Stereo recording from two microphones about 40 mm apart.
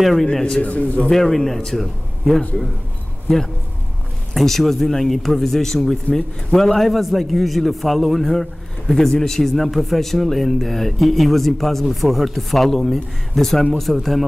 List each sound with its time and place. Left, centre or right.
0.0 s a man's voice: centre
0.3 s a man's voice: centre
0.6 s a man's voice: left
1.1 s a man's voice: centre
4.3 s a man's voice: centre